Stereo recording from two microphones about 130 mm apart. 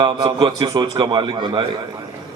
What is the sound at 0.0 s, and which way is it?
A man's voice, 35° right (ahead or behind).